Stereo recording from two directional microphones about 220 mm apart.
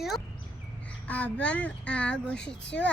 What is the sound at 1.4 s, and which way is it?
A woman's voice, 5° left (ahead or behind).